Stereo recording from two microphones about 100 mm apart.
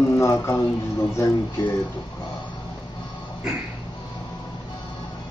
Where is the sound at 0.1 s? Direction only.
30° left (ahead or behind).